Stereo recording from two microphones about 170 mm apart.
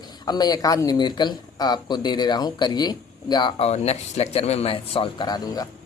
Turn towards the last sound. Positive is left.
turn(degrees=20)  # may be behind; listen again after turning